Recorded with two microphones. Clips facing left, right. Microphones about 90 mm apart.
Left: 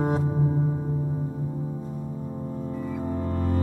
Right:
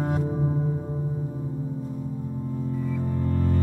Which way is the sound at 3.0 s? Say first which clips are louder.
Even; 30° left (ahead or behind).